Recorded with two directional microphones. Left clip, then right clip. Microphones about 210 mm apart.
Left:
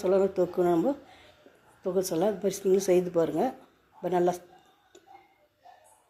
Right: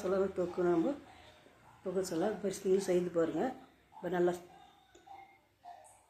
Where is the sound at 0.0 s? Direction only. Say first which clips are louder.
Left 9 dB; 30° left (ahead or behind).